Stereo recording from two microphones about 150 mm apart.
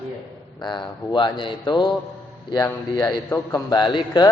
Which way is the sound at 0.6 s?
30° left (ahead or behind).